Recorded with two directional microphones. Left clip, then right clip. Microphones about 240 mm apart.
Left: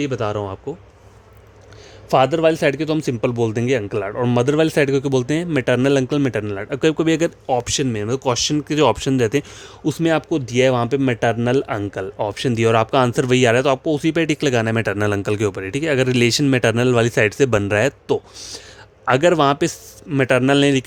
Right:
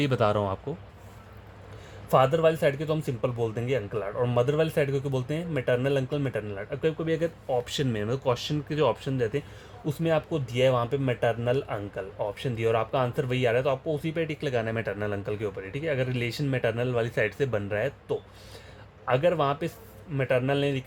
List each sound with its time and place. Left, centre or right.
0.0 s a man's voice: centre
2.0 s speech: left
7.8 s speech: left